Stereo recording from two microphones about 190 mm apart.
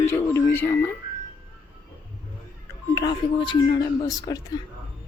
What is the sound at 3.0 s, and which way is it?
Speech, 25° left (ahead or behind).